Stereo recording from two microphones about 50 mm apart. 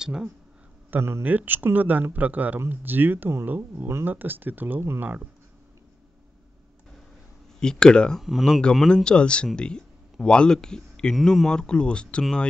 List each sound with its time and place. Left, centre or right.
0.0 s speech: centre
1.2 s speech: right
7.6 s speech: centre
8.2 s speech: centre
8.5 s speech: centre